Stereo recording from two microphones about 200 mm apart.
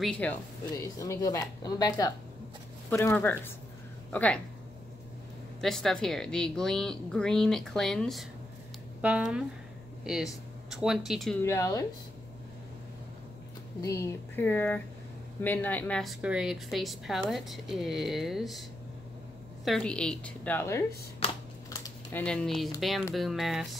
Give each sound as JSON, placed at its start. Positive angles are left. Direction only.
{"t": 0.0, "sound": "speech", "side_deg": 5}
{"t": 5.6, "sound": "a woman's voice", "side_deg": 0}
{"t": 11.4, "sound": "speech", "side_deg": 15}
{"t": 13.7, "sound": "a woman's voice", "side_deg": 15}
{"t": 19.6, "sound": "a woman's voice", "side_deg": 5}
{"t": 21.2, "sound": "computer keyboard", "side_deg": 30}
{"t": 21.6, "sound": "typing", "side_deg": 15}
{"t": 22.2, "sound": "a woman's voice", "side_deg": 5}